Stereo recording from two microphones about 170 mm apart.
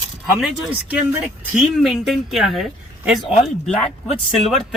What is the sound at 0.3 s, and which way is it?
Speech, centre (ahead or behind).